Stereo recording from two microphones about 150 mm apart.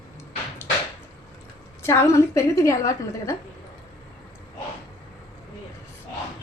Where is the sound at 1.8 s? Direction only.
20° left (ahead or behind).